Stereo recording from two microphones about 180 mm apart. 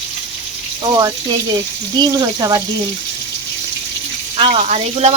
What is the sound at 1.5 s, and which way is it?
Speech, 20° right (ahead or behind).